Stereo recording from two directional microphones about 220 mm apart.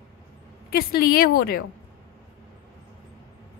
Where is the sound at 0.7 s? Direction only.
45° left (ahead or behind).